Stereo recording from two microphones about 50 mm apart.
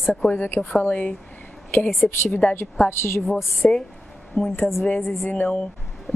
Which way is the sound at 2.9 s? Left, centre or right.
Left.